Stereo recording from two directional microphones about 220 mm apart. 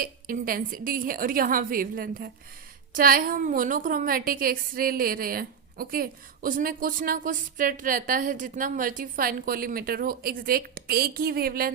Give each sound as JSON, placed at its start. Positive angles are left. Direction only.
{"t": 0.0, "sound": "a woman's voice", "side_deg": -40}